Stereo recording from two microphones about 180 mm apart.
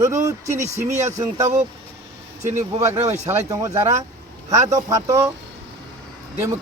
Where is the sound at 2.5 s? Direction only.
15° right (ahead or behind).